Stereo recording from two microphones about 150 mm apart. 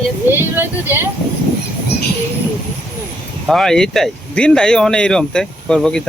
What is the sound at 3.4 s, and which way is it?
Speech, 5° left (ahead or behind).